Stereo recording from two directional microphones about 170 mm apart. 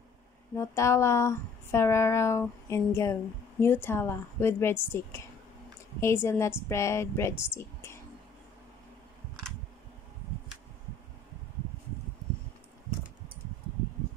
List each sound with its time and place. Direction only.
0.6 s speech: 15° left (ahead or behind)